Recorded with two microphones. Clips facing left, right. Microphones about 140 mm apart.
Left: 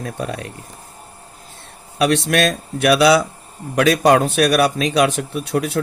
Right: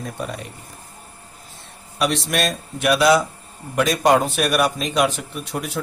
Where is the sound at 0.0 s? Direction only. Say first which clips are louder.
Left 3 dB; 65° left (ahead or behind).